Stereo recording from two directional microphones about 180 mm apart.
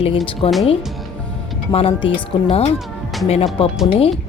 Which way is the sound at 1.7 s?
30° left (ahead or behind).